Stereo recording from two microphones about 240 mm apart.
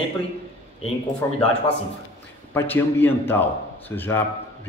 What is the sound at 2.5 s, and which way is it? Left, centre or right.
Speech, centre.